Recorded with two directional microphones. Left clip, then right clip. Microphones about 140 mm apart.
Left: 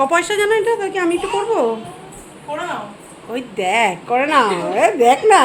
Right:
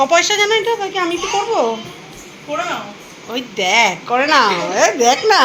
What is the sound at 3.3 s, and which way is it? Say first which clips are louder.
A woman's voice: right 3 dB; 10° left (ahead or behind).